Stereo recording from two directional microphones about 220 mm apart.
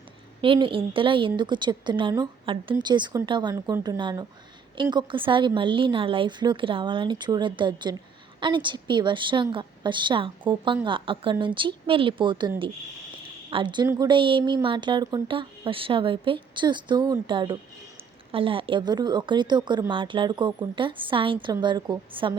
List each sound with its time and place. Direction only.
0.4 s a woman's voice: 25° right (ahead or behind)
13.5 s a woman's voice: 20° right (ahead or behind)